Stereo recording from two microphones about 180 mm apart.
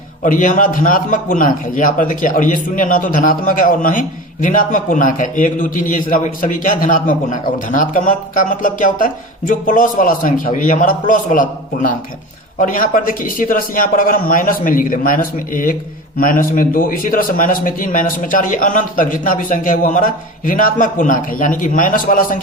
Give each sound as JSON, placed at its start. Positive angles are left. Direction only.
{"t": 0.2, "sound": "a man's voice", "side_deg": 45}